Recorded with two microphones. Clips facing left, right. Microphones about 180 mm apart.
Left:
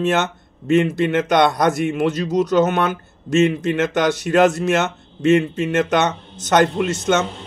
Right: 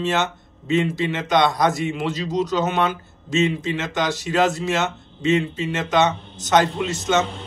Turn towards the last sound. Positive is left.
turn(degrees=60)  # may be behind; listen again after turning